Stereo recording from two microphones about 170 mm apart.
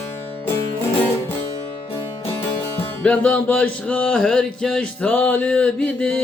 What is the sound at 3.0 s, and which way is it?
Music, 5° left (ahead or behind).